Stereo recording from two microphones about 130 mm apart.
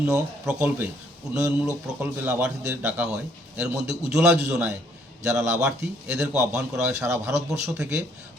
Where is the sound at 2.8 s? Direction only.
10° right (ahead or behind).